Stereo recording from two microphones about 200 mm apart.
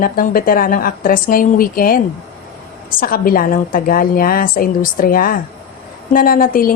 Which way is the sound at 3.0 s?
45° left (ahead or behind).